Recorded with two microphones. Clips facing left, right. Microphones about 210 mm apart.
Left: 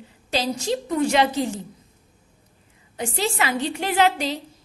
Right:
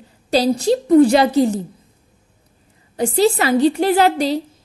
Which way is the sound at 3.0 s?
35° right (ahead or behind).